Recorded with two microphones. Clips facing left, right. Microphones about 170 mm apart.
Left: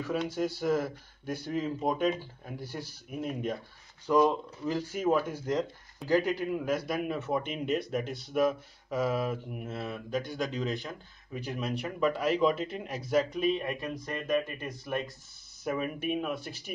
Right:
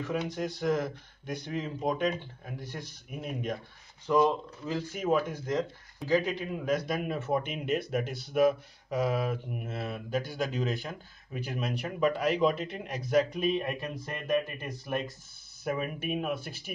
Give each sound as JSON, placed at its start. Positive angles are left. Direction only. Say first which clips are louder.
{"t": 0.3, "sound": "speech", "louder": "left 2 dB", "side_deg": 5}
{"t": 4.1, "sound": "speech", "louder": "even", "side_deg": 10}